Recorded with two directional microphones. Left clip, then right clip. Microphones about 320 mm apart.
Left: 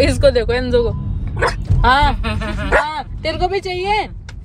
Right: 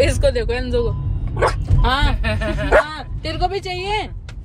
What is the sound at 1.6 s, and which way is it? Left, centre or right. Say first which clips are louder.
Speech: left 7 dB; left.